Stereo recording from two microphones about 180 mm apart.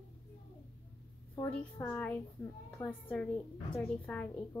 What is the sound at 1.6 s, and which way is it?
A woman's voice, 5° left (ahead or behind).